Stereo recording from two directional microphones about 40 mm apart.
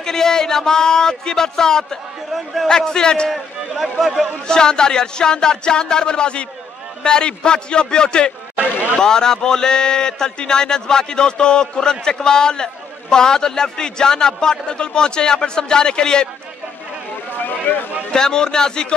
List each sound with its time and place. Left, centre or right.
0.0 s speech: centre
2.3 s a man's voice: centre
2.7 s speech: centre
3.3 s speech: centre
4.5 s speech: centre
17.4 s a sound: left
18.1 s speech: centre